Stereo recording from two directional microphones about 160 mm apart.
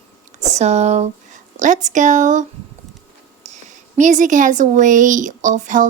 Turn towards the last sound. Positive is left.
turn(degrees=-50)  # may be behind; listen again after turning